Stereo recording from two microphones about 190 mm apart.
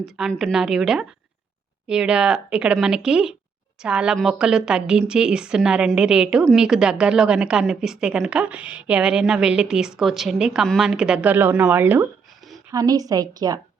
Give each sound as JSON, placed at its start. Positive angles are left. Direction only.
{"t": 0.2, "sound": "a woman's voice", "side_deg": 0}